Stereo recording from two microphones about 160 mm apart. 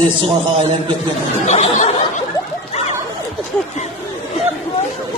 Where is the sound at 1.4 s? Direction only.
45° left (ahead or behind).